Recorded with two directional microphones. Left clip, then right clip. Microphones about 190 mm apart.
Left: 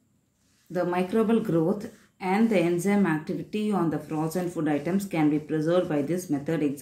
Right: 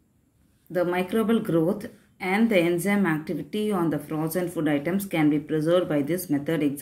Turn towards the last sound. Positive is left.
turn(degrees=-15)  # may be behind; listen again after turning